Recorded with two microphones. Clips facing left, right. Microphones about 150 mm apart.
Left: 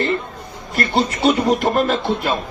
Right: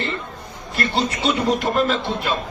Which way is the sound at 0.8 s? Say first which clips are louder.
Left 4 dB; 45° left (ahead or behind).